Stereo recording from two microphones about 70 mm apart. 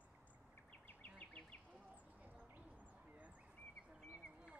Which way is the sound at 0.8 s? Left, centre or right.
Left.